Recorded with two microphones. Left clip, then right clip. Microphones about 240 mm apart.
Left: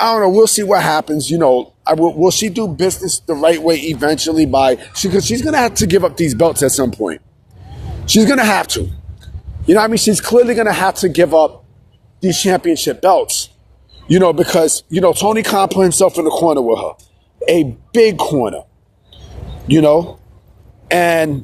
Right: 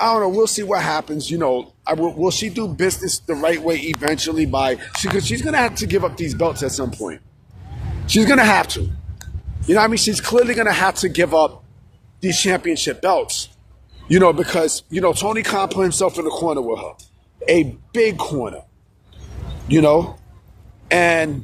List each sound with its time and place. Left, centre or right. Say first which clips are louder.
0.0 s speech: left 6 dB; left
19.7 s speech: left 3 dB; left